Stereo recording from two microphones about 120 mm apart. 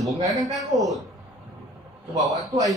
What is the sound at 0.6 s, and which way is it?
Speech, centre (ahead or behind).